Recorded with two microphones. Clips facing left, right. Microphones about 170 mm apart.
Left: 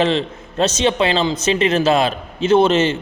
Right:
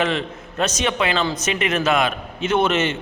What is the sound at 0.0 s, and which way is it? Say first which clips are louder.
A man's voice: left 4 dB; 30° left (ahead or behind).